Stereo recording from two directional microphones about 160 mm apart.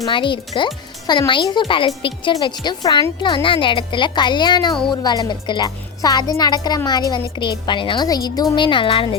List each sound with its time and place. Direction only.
0.0 s a woman's voice: 30° left (ahead or behind)